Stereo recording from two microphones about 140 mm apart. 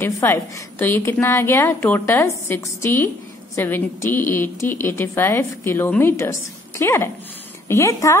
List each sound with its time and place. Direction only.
0.0 s a woman's voice: 15° left (ahead or behind)